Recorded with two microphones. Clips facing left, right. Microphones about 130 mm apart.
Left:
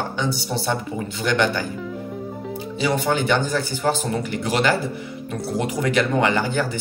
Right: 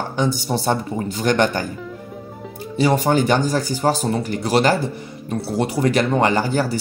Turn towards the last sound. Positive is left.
turn(degrees=-40)  # may be behind; listen again after turning